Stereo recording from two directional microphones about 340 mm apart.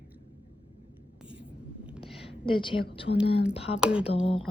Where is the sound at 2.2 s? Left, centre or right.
Centre.